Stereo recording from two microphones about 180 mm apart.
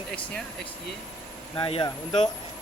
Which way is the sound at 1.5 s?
30° left (ahead or behind).